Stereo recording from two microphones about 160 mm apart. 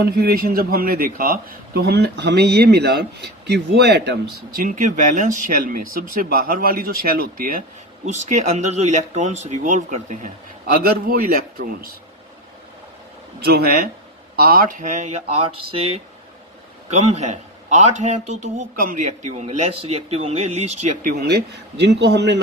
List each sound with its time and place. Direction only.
0.0 s a man's voice: 75° right (ahead or behind)
8.0 s speech: 50° right (ahead or behind)
10.8 s a man's voice: 70° right (ahead or behind)
13.4 s a man's voice: 80° right
14.3 s speech: 65° right (ahead or behind); by 22.4 s 90° right